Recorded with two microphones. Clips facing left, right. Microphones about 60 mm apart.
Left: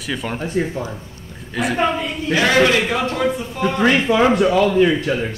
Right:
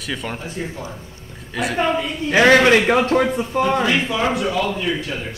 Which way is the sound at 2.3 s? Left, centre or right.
Right.